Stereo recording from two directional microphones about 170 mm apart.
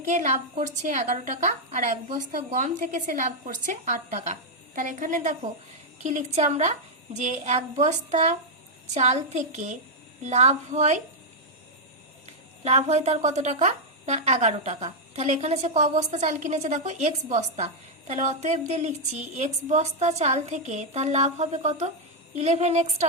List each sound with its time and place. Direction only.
0.0 s a woman's voice: 45° right (ahead or behind)
12.2 s speech: 40° right (ahead or behind)